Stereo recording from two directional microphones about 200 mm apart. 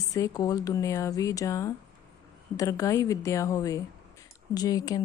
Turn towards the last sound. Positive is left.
turn(degrees=15)  # may be behind; listen again after turning